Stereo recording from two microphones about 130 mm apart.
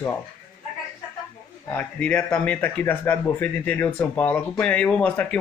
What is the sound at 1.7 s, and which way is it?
A man's voice, 10° left (ahead or behind).